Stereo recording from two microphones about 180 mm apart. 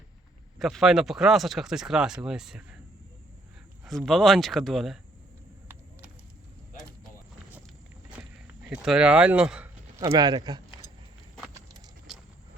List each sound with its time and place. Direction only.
0.6 s speech: centre (ahead or behind)
3.8 s speech: centre (ahead or behind)
8.2 s walk: 5° right (ahead or behind)
8.7 s speech: 5° right (ahead or behind)
10.0 s speech: 20° right (ahead or behind)